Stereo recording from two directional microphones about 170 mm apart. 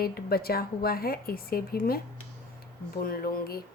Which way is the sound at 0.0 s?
65° left (ahead or behind).